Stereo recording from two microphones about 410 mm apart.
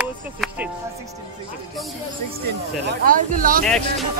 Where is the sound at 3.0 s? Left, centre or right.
Centre.